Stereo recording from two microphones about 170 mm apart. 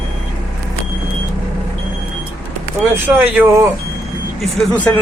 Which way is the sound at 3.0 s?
10° right (ahead or behind).